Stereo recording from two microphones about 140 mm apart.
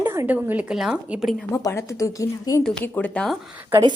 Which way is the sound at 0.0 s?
15° right (ahead or behind).